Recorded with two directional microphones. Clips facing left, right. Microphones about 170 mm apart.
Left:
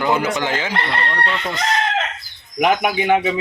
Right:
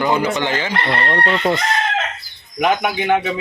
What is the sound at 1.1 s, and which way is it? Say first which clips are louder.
Chicken: right 6 dB; 50° right (ahead or behind).